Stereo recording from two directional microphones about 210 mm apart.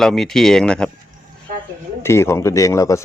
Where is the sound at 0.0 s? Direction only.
Centre (ahead or behind).